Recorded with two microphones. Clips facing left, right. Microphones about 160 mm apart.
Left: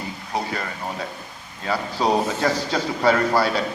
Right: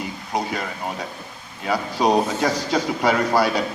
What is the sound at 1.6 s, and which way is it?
A man's voice, 15° right (ahead or behind).